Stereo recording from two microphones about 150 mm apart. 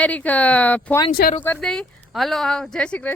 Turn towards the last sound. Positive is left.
turn(degrees=10)  # may be behind; listen again after turning